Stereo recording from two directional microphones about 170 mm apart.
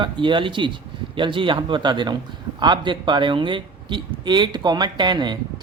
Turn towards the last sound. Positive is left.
turn(degrees=-25)  # may be behind; listen again after turning